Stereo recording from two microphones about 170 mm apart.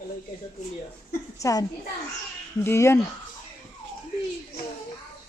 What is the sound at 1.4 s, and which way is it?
Speech, 20° left (ahead or behind).